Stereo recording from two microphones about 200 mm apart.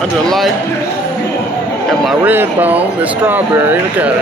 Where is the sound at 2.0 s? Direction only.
10° right (ahead or behind).